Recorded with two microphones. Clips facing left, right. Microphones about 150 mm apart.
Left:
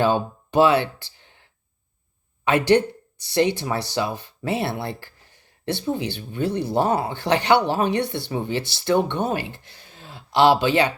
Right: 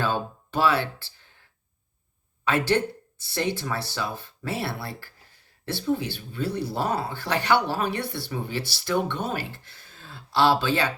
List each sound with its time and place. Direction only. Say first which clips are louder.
0.0 s speech: left 6 dB; 20° left (ahead or behind)
2.5 s speech: left 5 dB; 20° left (ahead or behind)